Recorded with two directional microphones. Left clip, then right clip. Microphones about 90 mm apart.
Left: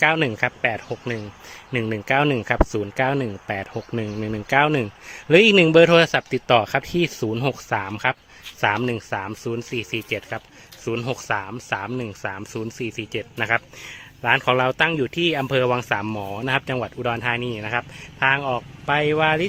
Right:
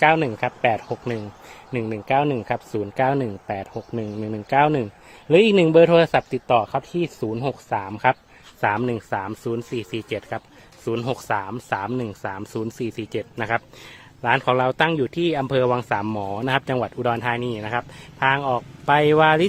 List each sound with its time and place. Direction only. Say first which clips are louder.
0.0 s speech: right 1 dB; centre (ahead or behind)
0.6 s speech: right 3 dB; 15° right (ahead or behind)
1.7 s speech: even; 5° left (ahead or behind)
2.9 s speech: right 1 dB; 15° right (ahead or behind)
3.4 s speech: left 1 dB; centre (ahead or behind)
6.5 s speech: left 2 dB; 20° left (ahead or behind)
7.8 s speech: left 2 dB; centre (ahead or behind)
8.6 s speech: even; 10° right (ahead or behind)
16.0 s speech: right 1 dB; 30° right (ahead or behind)
18.9 s speech: right 4 dB; 85° right